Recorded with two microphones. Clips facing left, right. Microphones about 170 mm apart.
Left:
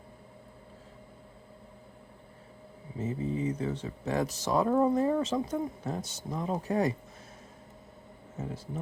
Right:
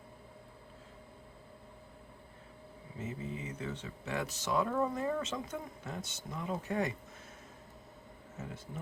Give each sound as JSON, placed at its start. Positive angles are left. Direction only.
{"t": 3.0, "sound": "speech", "side_deg": 35}